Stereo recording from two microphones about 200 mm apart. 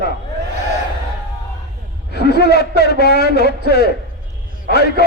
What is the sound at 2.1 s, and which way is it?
A man's voice, 55° left (ahead or behind).